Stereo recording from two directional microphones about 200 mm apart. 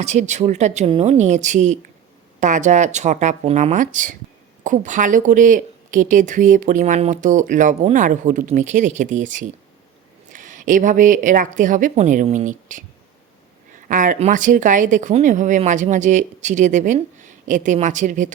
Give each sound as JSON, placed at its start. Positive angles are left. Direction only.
{"t": 0.0, "sound": "speech", "side_deg": -35}
{"t": 13.8, "sound": "speech", "side_deg": -40}